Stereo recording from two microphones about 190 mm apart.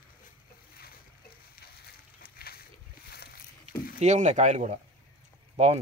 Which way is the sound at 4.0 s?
40° right (ahead or behind).